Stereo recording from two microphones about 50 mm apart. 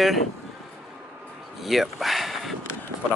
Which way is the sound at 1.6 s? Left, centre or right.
Centre.